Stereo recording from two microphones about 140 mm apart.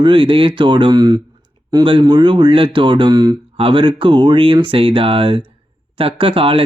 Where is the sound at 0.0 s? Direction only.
35° right (ahead or behind).